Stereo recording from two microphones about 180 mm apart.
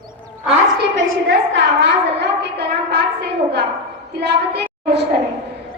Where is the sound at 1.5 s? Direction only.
85° right; by 3.6 s 70° right (ahead or behind).